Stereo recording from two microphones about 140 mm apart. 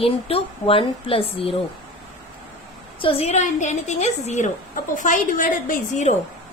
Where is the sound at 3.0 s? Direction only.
45° left (ahead or behind); by 6.2 s 65° left (ahead or behind).